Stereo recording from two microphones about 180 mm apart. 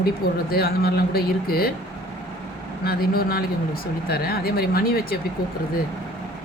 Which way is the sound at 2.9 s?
55° left (ahead or behind).